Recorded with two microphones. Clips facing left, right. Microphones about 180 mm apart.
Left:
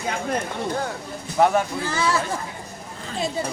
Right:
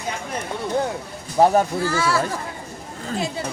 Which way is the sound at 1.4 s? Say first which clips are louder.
Right 3 dB; 35° right (ahead or behind).